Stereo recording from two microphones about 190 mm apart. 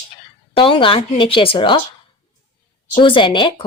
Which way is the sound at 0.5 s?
25° left (ahead or behind).